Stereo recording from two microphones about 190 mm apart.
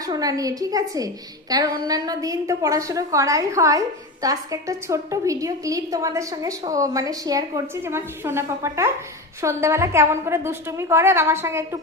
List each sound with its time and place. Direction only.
0.0 s a woman's voice: 20° right (ahead or behind)